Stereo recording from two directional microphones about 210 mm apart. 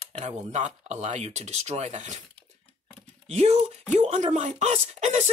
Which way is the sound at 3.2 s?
30° right (ahead or behind).